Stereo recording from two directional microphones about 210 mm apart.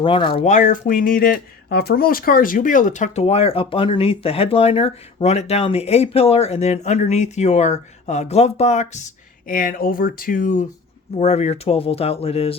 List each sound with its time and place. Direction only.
0.0 s speech: 25° left (ahead or behind)